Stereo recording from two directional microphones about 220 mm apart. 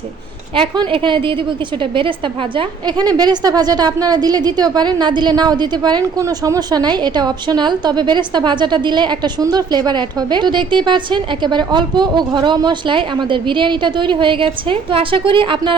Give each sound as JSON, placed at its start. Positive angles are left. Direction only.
{"t": 0.5, "sound": "a woman's voice", "side_deg": -25}